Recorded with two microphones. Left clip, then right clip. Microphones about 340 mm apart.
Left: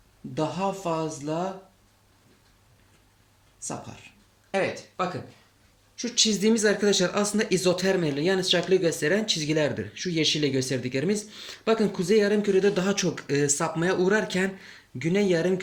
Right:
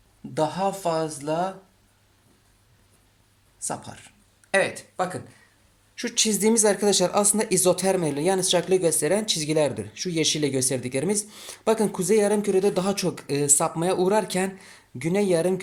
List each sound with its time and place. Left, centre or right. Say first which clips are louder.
0.9 s speech: right 3 dB; right
4.5 s speech: right 4 dB; right